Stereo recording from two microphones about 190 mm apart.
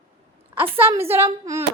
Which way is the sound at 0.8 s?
10° right (ahead or behind).